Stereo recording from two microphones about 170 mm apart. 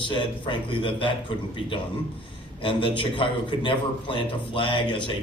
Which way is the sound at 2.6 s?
30° left (ahead or behind).